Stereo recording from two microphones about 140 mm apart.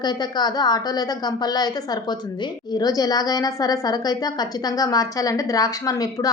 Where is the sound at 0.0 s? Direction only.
30° left (ahead or behind).